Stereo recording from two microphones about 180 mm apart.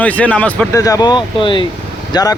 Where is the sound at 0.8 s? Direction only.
20° left (ahead or behind).